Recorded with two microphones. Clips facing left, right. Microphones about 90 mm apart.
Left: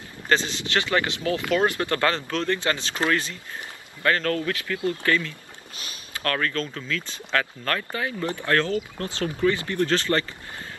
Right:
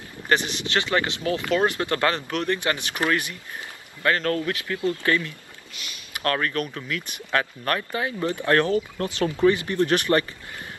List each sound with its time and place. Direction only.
0.3 s speech: 20° right (ahead or behind)